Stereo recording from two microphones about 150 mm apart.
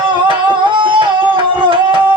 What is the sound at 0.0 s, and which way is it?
Music, 35° right (ahead or behind).